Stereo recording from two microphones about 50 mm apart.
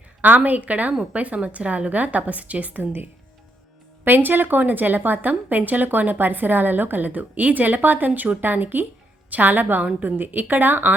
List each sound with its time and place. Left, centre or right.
0.2 s a woman's voice: right
4.0 s a woman's voice: right